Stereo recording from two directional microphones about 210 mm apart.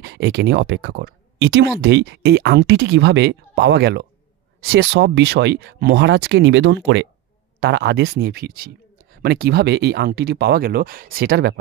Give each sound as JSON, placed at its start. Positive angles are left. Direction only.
{"t": 0.0, "sound": "speech", "side_deg": -50}